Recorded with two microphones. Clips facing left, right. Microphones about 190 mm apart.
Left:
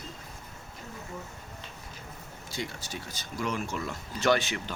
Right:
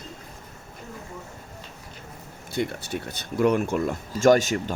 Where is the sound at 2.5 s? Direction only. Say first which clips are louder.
Right 9 dB; 60° right (ahead or behind).